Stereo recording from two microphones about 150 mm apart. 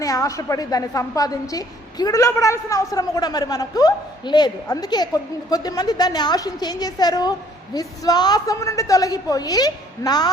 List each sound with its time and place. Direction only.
0.0 s a woman's voice: 25° left (ahead or behind)